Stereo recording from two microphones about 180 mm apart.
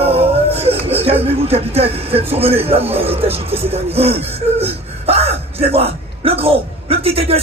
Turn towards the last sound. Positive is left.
turn(degrees=-35)  # may be behind; listen again after turning